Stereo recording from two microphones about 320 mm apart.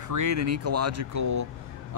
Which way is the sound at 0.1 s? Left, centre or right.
Right.